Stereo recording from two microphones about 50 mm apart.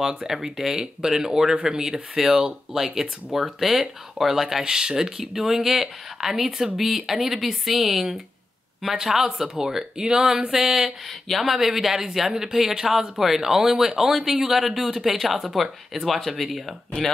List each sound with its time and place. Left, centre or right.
0.0 s speech: centre
13.7 s speech: centre